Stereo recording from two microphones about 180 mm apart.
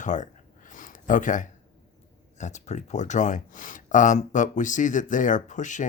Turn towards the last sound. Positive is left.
turn(degrees=45)  # may be behind; listen again after turning